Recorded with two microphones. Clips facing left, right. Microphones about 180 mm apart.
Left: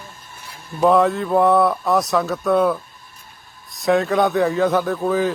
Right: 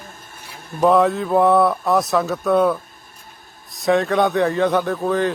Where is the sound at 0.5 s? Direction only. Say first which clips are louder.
Right 1 dB; 50° right (ahead or behind).